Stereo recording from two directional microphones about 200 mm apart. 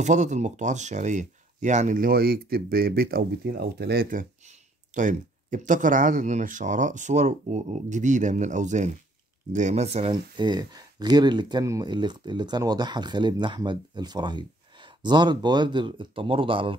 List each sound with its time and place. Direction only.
0.0 s speech: 35° right (ahead or behind)